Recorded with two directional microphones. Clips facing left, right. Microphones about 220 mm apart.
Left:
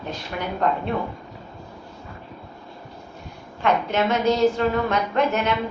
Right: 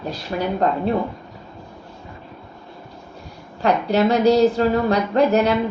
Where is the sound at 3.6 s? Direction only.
35° right (ahead or behind).